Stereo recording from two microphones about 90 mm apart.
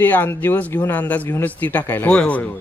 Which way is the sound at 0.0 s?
25° left (ahead or behind).